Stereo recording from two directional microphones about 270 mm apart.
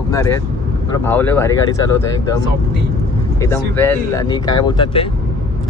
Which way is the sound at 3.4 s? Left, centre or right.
Centre.